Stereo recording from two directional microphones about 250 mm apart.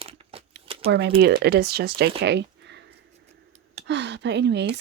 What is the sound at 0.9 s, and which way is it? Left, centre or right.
Speech, right.